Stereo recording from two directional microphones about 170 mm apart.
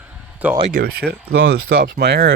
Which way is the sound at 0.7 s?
60° right (ahead or behind).